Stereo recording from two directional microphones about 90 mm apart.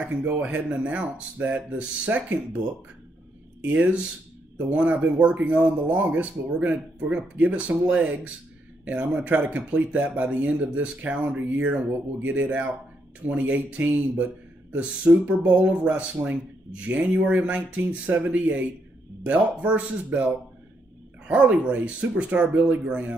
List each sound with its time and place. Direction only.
0.1 s speech: 20° right (ahead or behind)
3.6 s speech: 15° right (ahead or behind)